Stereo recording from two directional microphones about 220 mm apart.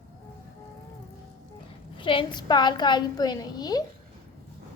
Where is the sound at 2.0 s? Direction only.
25° left (ahead or behind).